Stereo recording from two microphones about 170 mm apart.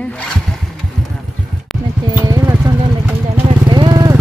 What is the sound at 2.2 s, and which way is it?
Clip-clop, 20° right (ahead or behind).